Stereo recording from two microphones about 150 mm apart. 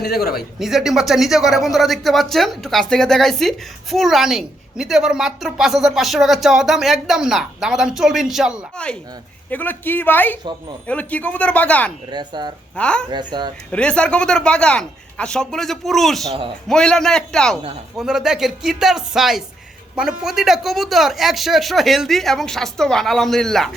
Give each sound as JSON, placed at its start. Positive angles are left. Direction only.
{"t": 0.0, "sound": "speech", "side_deg": 90}
{"t": 0.6, "sound": "speech", "side_deg": 0}
{"t": 9.5, "sound": "speech", "side_deg": 10}
{"t": 12.1, "sound": "speech", "side_deg": -30}
{"t": 12.7, "sound": "speech", "side_deg": 5}
{"t": 13.1, "sound": "speech", "side_deg": -30}
{"t": 13.7, "sound": "speech", "side_deg": 5}